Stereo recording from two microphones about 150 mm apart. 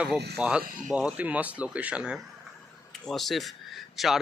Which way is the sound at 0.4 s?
10° right (ahead or behind).